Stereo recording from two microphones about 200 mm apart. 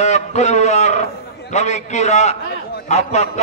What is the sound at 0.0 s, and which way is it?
A man's voice, 35° left (ahead or behind).